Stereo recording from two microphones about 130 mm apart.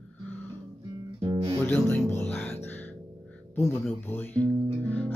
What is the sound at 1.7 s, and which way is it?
Music, 15° left (ahead or behind).